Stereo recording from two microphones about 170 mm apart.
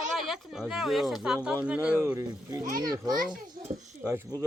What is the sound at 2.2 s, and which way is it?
Speech, 20° right (ahead or behind).